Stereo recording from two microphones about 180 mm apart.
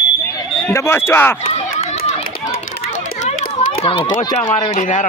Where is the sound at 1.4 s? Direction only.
35° left (ahead or behind).